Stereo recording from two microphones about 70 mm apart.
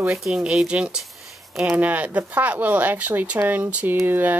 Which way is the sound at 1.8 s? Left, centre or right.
Right.